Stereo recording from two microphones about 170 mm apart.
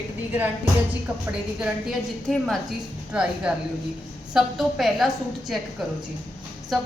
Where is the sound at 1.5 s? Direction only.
Centre (ahead or behind).